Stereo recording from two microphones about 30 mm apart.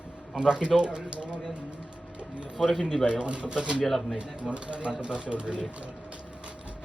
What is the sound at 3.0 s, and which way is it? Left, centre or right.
Speech, right.